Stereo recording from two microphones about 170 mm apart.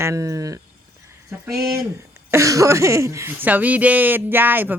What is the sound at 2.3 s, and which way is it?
Speech, 20° right (ahead or behind).